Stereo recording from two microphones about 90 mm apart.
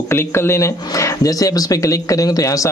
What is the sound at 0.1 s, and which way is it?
A man's voice, 30° left (ahead or behind).